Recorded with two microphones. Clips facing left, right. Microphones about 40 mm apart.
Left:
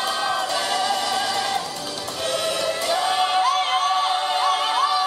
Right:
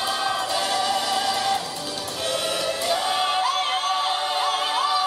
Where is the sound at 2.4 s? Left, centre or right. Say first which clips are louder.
Left 2 dB; centre.